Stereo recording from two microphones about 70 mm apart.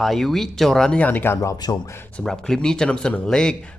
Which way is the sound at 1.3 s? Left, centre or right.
Left.